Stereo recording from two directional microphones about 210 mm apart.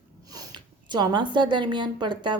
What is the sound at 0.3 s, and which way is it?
A woman's voice, 15° right (ahead or behind).